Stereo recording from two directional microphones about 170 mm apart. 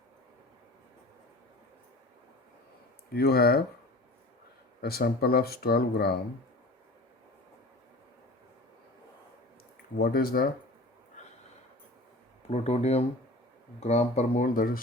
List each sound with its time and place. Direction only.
3.2 s speech: 65° left (ahead or behind)
4.8 s speech: 65° left (ahead or behind)
10.0 s speech: 65° left (ahead or behind)
12.5 s speech: 40° left (ahead or behind); by 14.8 s 55° left (ahead or behind)